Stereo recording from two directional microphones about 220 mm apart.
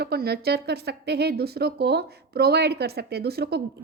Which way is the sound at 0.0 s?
45° right (ahead or behind).